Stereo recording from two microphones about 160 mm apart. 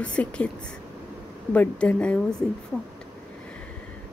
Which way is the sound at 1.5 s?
10° left (ahead or behind).